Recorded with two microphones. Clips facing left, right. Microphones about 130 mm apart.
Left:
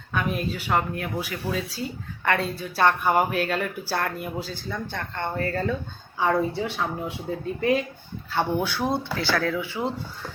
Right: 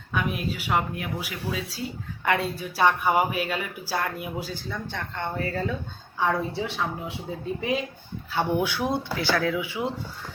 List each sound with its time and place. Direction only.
0.1 s speech: 5° right (ahead or behind)
6.1 s speech: 5° left (ahead or behind); by 9.8 s 10° right (ahead or behind)